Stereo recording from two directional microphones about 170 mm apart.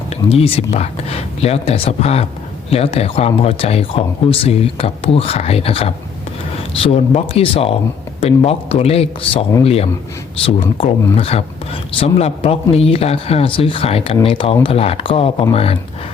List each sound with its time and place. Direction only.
0.3 s speech: 35° left (ahead or behind)